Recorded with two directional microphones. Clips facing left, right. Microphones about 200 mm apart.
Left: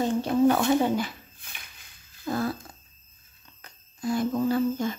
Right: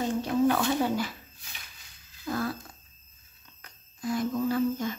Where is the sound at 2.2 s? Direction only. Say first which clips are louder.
Left 3 dB; 25° left (ahead or behind).